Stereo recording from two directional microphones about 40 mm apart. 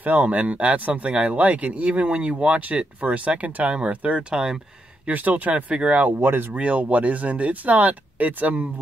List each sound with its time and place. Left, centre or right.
0.0 s speech: right
4.3 s speech: centre
5.0 s speech: right
6.1 s speech: right
6.5 s speech: right